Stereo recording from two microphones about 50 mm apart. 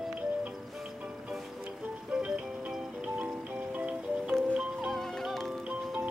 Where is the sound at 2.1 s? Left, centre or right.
Centre; by 4.0 s right.